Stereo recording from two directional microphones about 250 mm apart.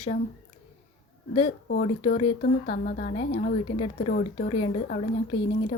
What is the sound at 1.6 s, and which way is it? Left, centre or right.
A woman's voice, left.